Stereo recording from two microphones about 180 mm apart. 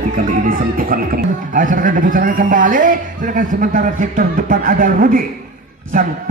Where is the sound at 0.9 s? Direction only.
50° right (ahead or behind).